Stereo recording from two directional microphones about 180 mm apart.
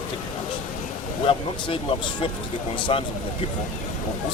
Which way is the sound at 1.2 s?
25° left (ahead or behind).